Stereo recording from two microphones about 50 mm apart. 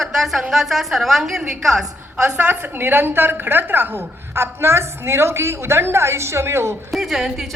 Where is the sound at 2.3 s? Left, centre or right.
Right.